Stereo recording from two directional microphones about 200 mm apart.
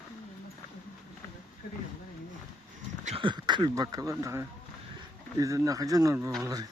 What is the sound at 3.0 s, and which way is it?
Speech, 30° right (ahead or behind).